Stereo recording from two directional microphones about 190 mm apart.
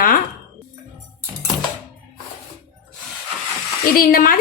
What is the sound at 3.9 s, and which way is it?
Speech, 50° left (ahead or behind).